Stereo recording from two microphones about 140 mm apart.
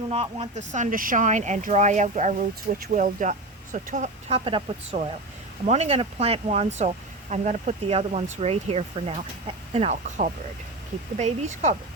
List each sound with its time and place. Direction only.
0.1 s speech: 45° right (ahead or behind); by 4.1 s 65° right (ahead or behind)
4.3 s speech: 40° right (ahead or behind)